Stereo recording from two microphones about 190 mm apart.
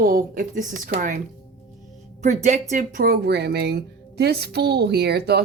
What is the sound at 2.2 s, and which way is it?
Speech, 40° right (ahead or behind).